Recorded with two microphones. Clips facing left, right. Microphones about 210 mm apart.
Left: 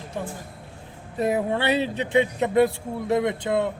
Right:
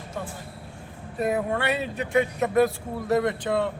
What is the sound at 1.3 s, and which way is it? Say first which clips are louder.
Speech: left 3 dB; 30° left (ahead or behind).